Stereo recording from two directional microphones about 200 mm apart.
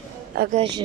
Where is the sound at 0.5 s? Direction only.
30° right (ahead or behind).